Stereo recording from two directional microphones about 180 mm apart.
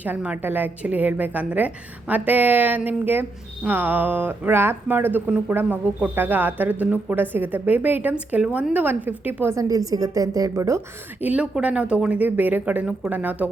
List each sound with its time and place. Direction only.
0.0 s a woman's voice: 10° right (ahead or behind)